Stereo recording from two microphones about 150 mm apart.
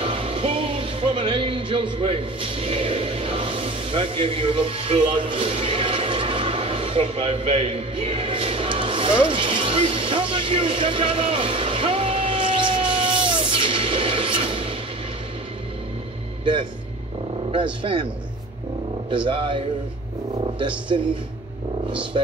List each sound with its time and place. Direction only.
0.0 s speech: 35° right (ahead or behind)
9.2 s music: 35° right (ahead or behind)
17.8 s speech: 35° right (ahead or behind)
19.0 s speech: 35° right (ahead or behind)
20.9 s speech: 35° right (ahead or behind)
22.2 s speech: 40° right (ahead or behind)